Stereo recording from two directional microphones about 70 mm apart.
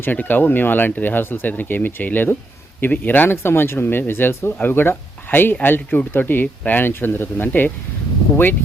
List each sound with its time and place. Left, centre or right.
0.0 s speech: left